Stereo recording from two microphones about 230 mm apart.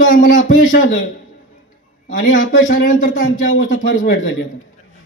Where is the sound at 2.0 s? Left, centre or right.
Left.